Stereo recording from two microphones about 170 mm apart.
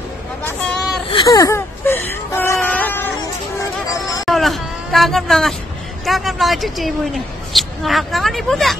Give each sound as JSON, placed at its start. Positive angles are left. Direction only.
{"t": 1.1, "sound": "whimper", "side_deg": 20}
{"t": 3.8, "sound": "music", "side_deg": 20}
{"t": 4.3, "sound": "a sound", "side_deg": 0}
{"t": 6.0, "sound": "speech", "side_deg": 0}